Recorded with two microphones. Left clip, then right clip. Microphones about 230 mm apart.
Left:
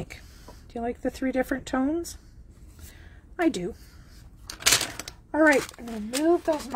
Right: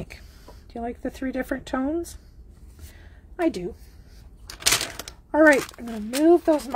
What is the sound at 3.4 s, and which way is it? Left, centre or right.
Speech, centre.